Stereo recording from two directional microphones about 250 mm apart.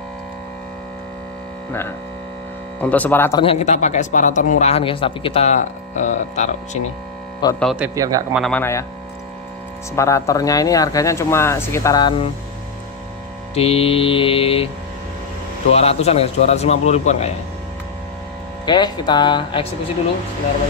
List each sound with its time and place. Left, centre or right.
2.8 s speech: centre
3.4 s speech: left
7.5 s speech: centre
8.4 s speech: centre
9.9 s speech: centre
13.6 s speech: left
15.7 s speech: left
18.7 s speech: centre